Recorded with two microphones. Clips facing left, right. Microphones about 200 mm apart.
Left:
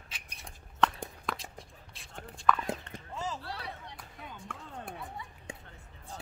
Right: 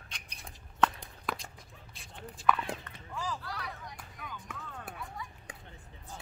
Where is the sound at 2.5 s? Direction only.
10° right (ahead or behind).